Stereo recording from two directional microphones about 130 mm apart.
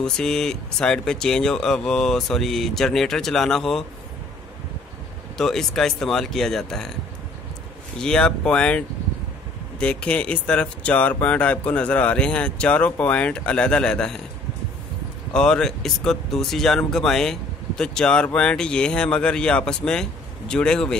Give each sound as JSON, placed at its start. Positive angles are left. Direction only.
{"t": 0.0, "sound": "speech", "side_deg": 5}
{"t": 5.4, "sound": "speech", "side_deg": 5}
{"t": 8.0, "sound": "speech", "side_deg": 5}
{"t": 15.3, "sound": "speech", "side_deg": 5}